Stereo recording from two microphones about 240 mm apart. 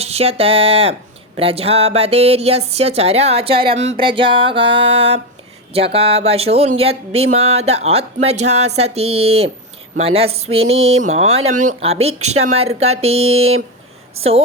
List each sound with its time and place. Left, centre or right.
0.0 s speech: right